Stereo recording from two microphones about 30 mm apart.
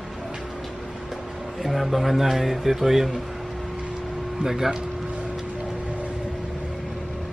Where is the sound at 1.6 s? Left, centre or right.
Centre.